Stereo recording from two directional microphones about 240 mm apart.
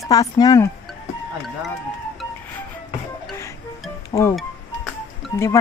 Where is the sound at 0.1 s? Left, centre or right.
Centre.